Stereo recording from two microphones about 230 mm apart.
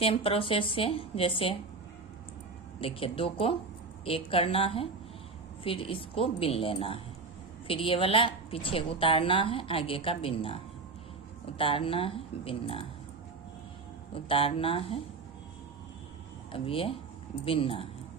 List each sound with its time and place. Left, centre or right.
0.0 s a woman's voice: left
2.8 s a woman's voice: left
14.1 s a woman's voice: left
16.5 s a woman's voice: left